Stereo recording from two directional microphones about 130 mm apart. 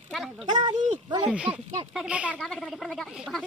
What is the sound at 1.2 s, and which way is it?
Speech, 10° right (ahead or behind).